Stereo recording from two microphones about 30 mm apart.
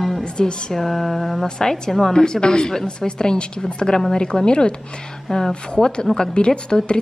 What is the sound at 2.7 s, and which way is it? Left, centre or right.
Mantra, centre.